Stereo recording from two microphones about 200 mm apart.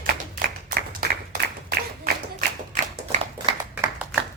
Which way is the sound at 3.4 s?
20° right (ahead or behind).